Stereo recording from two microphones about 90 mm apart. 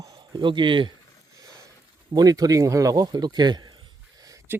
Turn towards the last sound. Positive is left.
turn(degrees=-25)  # may be behind; listen again after turning